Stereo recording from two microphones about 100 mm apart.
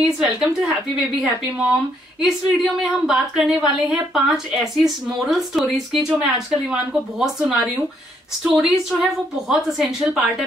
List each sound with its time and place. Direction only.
0.4 s a woman's voice: 5° right (ahead or behind)